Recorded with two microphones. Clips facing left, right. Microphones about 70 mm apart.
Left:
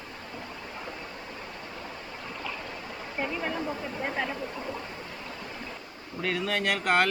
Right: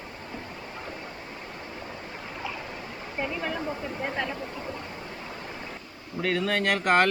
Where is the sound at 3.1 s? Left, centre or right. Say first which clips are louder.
Right 1 dB; centre.